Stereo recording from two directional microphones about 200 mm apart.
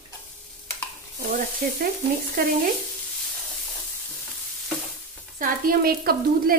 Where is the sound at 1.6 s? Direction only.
45° right (ahead or behind).